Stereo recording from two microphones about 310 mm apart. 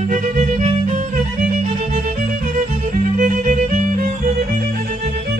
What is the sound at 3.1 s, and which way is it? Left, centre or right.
Music, right.